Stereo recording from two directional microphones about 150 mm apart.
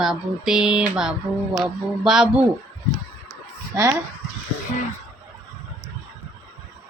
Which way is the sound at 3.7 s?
20° right (ahead or behind).